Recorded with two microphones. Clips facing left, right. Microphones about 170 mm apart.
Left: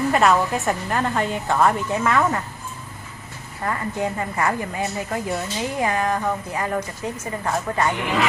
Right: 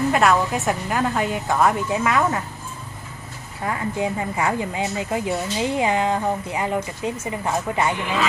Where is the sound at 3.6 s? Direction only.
10° right (ahead or behind).